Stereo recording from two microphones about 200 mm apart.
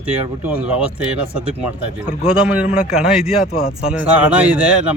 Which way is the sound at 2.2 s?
5° right (ahead or behind).